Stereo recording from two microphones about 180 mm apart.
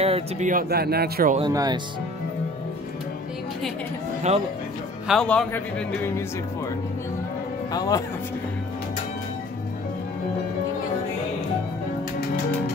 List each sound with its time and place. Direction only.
0.0 s speech: 40° right (ahead or behind); by 1.3 s 60° right (ahead or behind)
1.4 s speech: 20° right (ahead or behind)
4.3 s speech: 35° right (ahead or behind)
5.0 s speech: 5° left (ahead or behind)
7.7 s speech: 20° left (ahead or behind)